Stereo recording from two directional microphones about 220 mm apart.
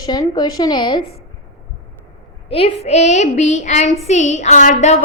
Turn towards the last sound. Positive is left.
turn(degrees=30)  # may be behind; listen again after turning